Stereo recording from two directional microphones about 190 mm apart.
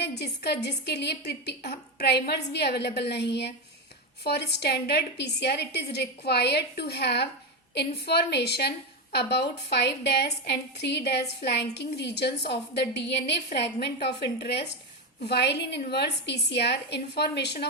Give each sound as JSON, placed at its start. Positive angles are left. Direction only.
{"t": 0.0, "sound": "a woman's voice", "side_deg": 60}